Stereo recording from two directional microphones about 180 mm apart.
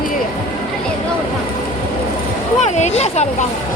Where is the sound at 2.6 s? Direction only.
40° left (ahead or behind).